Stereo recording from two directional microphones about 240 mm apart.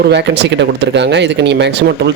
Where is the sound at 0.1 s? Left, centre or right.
Right.